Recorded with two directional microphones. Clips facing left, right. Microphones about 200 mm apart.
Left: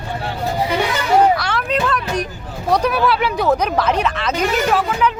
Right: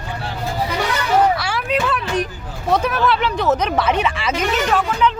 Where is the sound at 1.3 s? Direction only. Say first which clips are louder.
Left 1 dB; 5° right (ahead or behind).